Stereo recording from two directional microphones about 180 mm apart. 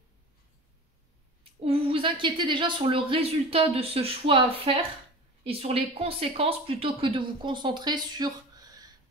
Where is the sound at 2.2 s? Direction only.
25° right (ahead or behind).